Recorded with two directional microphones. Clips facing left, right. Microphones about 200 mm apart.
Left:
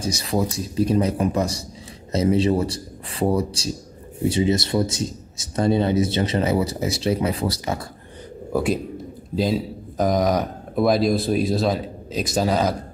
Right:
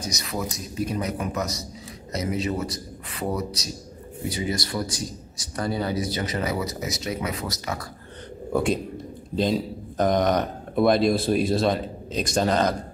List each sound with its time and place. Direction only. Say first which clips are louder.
0.0 s speech: left 7 dB; 30° left (ahead or behind)
8.5 s speech: left 1 dB; 5° left (ahead or behind)